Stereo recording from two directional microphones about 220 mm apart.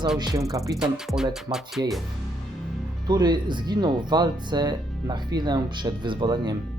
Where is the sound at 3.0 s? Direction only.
20° right (ahead or behind).